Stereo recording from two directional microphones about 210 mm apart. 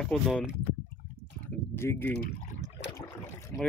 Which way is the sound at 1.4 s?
10° left (ahead or behind).